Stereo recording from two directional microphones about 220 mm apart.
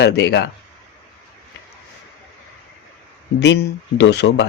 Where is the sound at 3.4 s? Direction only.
50° left (ahead or behind).